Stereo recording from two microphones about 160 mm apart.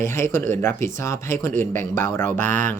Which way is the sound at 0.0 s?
15° left (ahead or behind).